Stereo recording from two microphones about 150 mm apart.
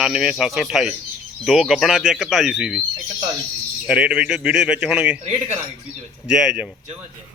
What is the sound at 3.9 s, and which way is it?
A man's voice, 5° right (ahead or behind).